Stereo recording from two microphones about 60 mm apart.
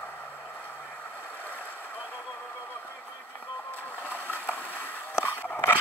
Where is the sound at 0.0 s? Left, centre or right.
Left.